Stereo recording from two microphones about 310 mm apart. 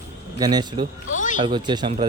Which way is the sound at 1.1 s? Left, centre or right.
Left.